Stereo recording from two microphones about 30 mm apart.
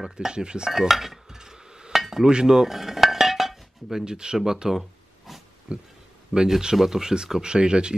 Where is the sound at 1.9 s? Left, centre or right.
Centre.